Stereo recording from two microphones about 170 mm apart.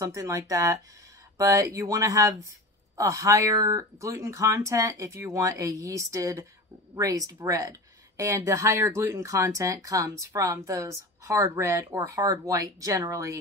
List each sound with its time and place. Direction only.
0.0 s speech: 20° right (ahead or behind)